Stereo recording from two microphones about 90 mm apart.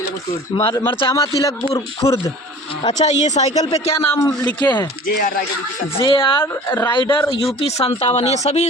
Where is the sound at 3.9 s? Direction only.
30° left (ahead or behind).